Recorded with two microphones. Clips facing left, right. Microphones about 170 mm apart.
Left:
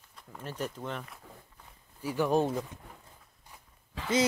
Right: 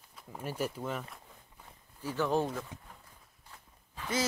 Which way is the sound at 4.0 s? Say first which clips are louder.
Left 4 dB; 90° left.